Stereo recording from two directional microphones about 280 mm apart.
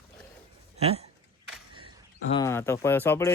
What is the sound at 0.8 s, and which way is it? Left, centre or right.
Speech, right.